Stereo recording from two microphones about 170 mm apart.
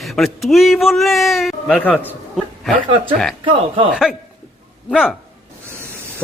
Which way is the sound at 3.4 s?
30° right (ahead or behind).